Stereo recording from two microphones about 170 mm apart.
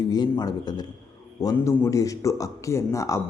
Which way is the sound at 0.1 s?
25° left (ahead or behind).